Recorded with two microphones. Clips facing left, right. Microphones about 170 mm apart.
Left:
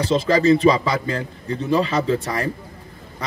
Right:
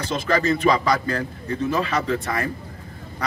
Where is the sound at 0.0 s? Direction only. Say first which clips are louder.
Left 5 dB; 30° left (ahead or behind).